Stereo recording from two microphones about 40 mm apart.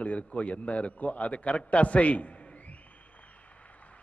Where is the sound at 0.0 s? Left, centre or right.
Left.